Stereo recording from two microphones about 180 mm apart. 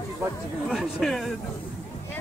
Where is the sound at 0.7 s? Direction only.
Centre (ahead or behind).